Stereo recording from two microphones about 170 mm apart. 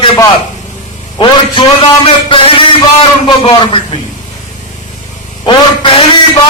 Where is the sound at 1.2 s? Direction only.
35° left (ahead or behind).